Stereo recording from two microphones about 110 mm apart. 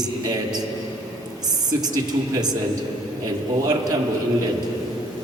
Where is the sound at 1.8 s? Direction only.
35° right (ahead or behind).